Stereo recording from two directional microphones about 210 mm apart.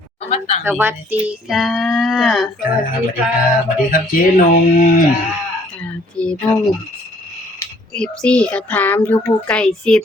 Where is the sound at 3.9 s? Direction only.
40° left (ahead or behind).